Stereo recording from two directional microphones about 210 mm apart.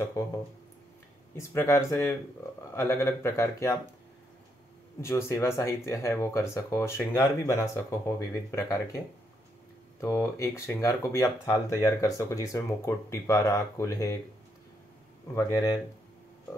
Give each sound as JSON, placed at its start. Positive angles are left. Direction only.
{"t": 0.2, "sound": "speech", "side_deg": 15}
{"t": 5.0, "sound": "speech", "side_deg": 10}
{"t": 15.3, "sound": "speech", "side_deg": 15}